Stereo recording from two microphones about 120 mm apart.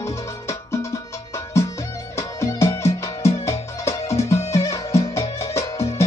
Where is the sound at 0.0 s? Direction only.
25° left (ahead or behind).